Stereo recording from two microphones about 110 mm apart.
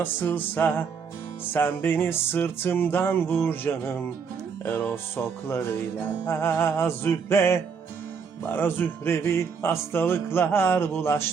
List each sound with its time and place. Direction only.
0.0 s music: 20° left (ahead or behind)